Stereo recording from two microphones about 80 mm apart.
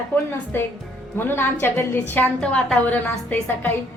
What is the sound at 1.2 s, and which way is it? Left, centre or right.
A woman's voice, left.